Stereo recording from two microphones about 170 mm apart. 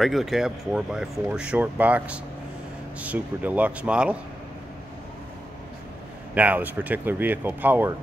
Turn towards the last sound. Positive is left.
turn(degrees=-10)  # may be behind; listen again after turning